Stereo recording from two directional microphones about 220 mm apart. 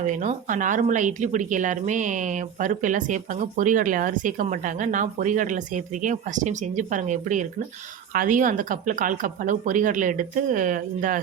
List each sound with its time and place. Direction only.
0.0 s speech: 35° right (ahead or behind)